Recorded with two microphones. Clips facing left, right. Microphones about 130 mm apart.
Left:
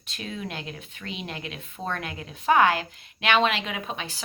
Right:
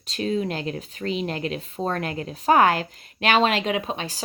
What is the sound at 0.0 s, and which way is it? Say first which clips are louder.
Speech: right 10 dB; 35° right (ahead or behind).